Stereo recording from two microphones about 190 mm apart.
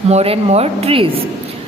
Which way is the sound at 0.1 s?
35° right (ahead or behind).